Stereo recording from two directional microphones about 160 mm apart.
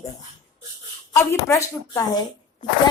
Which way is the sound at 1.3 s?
20° left (ahead or behind).